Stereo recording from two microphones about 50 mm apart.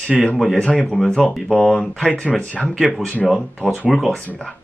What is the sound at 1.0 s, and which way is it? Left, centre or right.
Speech, centre.